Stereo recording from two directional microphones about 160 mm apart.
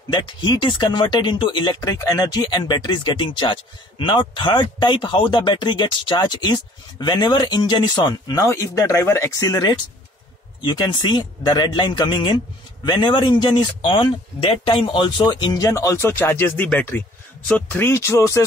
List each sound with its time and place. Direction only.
0.1 s speech: 30° left (ahead or behind)